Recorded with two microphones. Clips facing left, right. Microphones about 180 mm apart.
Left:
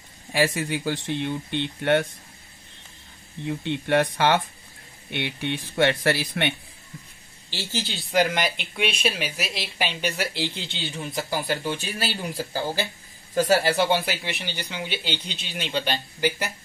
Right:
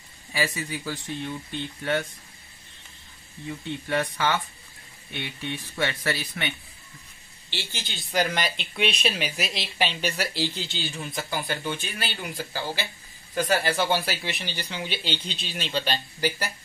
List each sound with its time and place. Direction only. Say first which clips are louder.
0.3 s speech: left 6 dB; 60° left (ahead or behind)
3.4 s speech: left 6 dB; 75° left (ahead or behind)
7.4 s speech: left 6 dB; 40° left (ahead or behind)
8.2 s speech: left 3 dB; 20° left (ahead or behind)
8.7 s speech: right 1 dB; 5° left (ahead or behind); by 14.1 s 25° left (ahead or behind)
14.2 s speech: left 1 dB; 15° left (ahead or behind)